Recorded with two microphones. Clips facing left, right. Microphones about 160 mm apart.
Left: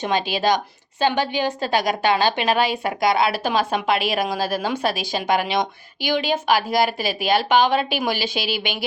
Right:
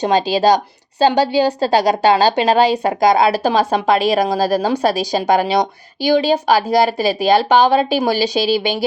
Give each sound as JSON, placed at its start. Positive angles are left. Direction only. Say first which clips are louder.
{"t": 0.0, "sound": "a woman's voice", "louder": "right 7 dB", "side_deg": -40}